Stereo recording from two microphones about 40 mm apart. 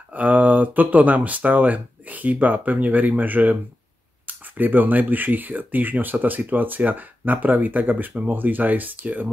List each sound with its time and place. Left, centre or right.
0.1 s speech: right